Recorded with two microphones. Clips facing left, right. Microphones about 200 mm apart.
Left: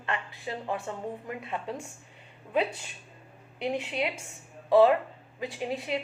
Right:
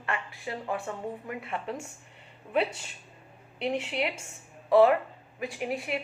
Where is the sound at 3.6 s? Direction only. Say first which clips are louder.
Even; 15° left (ahead or behind).